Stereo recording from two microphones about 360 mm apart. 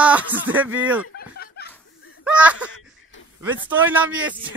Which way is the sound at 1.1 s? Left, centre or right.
Left.